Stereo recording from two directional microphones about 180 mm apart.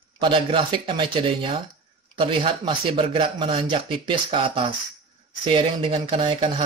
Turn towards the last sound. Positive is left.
turn(degrees=-30)  # may be behind; listen again after turning